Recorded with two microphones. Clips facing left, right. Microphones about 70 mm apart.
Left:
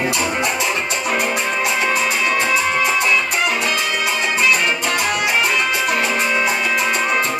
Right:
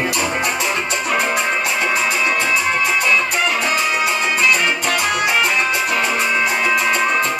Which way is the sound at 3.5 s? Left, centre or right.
Right.